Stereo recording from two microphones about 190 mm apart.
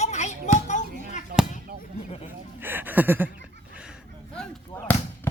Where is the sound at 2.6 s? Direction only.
10° right (ahead or behind).